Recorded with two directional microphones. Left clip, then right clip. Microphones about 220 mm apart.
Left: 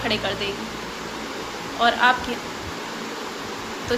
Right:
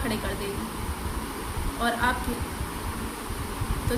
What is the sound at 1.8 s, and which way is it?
Speech, 20° right (ahead or behind).